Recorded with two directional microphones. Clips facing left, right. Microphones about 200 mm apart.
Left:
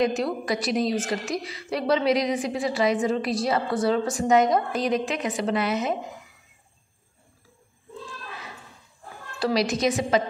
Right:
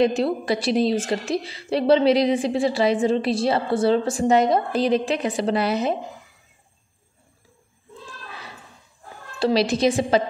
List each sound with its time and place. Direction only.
0.0 s a woman's voice: 30° right (ahead or behind)
9.4 s a woman's voice: 30° right (ahead or behind)